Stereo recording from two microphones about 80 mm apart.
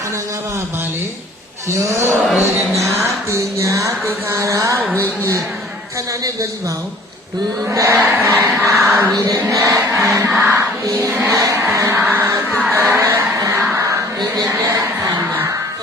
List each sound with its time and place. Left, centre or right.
1.8 s speech: right
2.2 s music: centre
2.8 s music: right
4.9 s speech: right
7.7 s a sound: right
9.1 s music: right
10.2 s music: right
10.6 s music: right
12.7 s a sound: right
13.0 s honk: right